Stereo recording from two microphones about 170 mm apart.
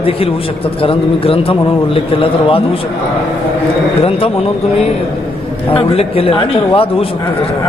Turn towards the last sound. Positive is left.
turn(degrees=30)  # may be behind; listen again after turning